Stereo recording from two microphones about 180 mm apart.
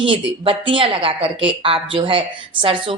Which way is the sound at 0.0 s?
30° right (ahead or behind).